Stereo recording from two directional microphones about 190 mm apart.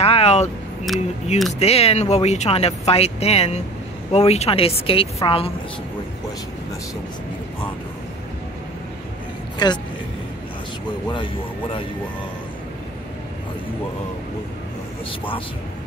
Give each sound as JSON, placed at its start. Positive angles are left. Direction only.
{"t": 0.0, "sound": "vehicle", "side_deg": 30}
{"t": 0.9, "sound": "speech", "side_deg": 0}
{"t": 1.6, "sound": "a woman's voice", "side_deg": 30}
{"t": 9.6, "sound": "a woman's voice", "side_deg": 25}
{"t": 15.0, "sound": "a woman's voice", "side_deg": 30}